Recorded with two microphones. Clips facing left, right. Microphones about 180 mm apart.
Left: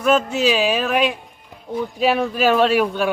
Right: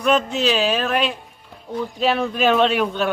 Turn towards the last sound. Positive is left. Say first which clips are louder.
# left 2 dB
turn(degrees=5)  # may be behind; listen again after turning